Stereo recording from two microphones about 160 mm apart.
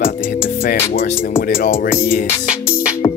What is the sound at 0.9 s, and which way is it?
Music, 70° left (ahead or behind).